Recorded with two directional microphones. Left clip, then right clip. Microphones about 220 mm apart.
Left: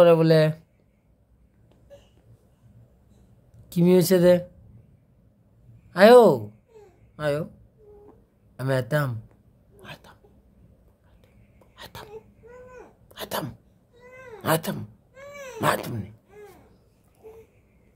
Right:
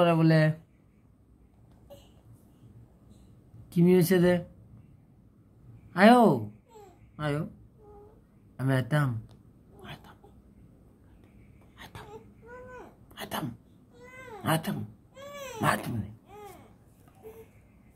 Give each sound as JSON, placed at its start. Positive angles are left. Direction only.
{"t": 0.0, "sound": "speech", "side_deg": 20}
{"t": 3.7, "sound": "speech", "side_deg": 20}
{"t": 5.9, "sound": "speech", "side_deg": 15}
{"t": 8.5, "sound": "speech", "side_deg": 15}
{"t": 9.8, "sound": "a sound", "side_deg": 15}
{"t": 11.7, "sound": "a sound", "side_deg": 25}
{"t": 13.1, "sound": "sneeze", "side_deg": 15}
{"t": 14.4, "sound": "speech", "side_deg": 20}
{"t": 15.4, "sound": "dog", "side_deg": 15}